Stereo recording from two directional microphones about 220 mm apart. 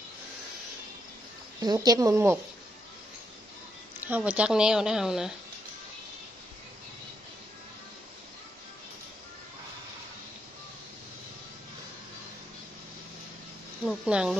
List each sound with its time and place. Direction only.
1.6 s speech: 20° right (ahead or behind)
4.0 s speech: 5° right (ahead or behind)
13.8 s speech: 5° right (ahead or behind)